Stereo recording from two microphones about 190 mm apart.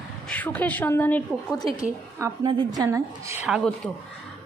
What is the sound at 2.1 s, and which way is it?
A woman's voice, 20° right (ahead or behind).